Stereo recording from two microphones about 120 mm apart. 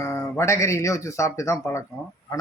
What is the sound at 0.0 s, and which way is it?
Speech, 25° left (ahead or behind).